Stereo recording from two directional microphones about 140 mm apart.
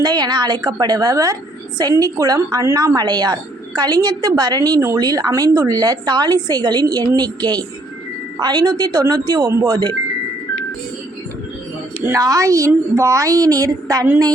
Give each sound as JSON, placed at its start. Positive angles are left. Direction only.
{"t": 0.0, "sound": "a woman's voice", "side_deg": -30}
{"t": 11.9, "sound": "a woman's voice", "side_deg": -20}